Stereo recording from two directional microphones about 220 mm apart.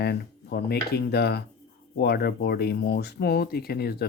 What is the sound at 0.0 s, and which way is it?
Speech, 45° left (ahead or behind).